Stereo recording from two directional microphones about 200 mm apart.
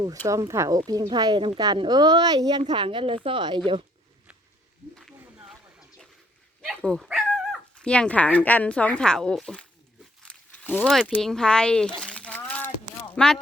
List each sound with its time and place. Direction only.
0.3 s a woman's voice: 15° right (ahead or behind)
4.9 s wild animals: centre (ahead or behind)
6.7 s speech: centre (ahead or behind)
11.9 s a sound: 5° left (ahead or behind)